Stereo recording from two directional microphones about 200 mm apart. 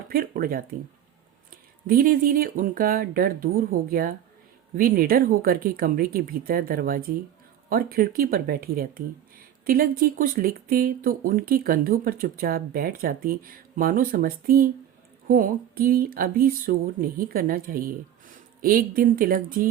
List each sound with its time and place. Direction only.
0.1 s speech: 45° right (ahead or behind)
1.9 s speech: 45° right (ahead or behind)